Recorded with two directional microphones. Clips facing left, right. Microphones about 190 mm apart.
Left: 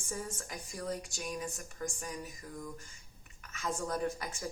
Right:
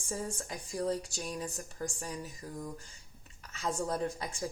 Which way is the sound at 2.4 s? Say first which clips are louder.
Right 3 dB; 30° right (ahead or behind).